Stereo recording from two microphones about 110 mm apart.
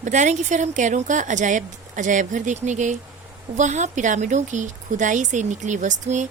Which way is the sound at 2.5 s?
90° right.